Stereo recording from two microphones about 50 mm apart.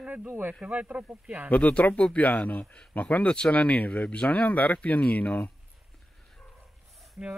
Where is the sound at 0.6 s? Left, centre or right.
Right.